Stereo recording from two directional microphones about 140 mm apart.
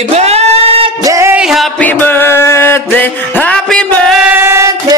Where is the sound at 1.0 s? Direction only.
20° right (ahead or behind).